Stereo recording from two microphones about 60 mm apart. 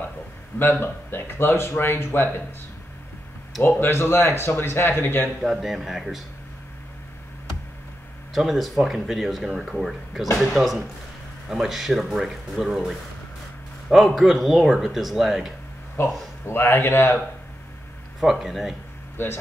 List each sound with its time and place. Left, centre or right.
0.6 s speech: left
3.6 s speech: left
5.4 s speech: centre
8.4 s speech: centre
16.0 s speech: left
18.2 s speech: centre
19.2 s speech: left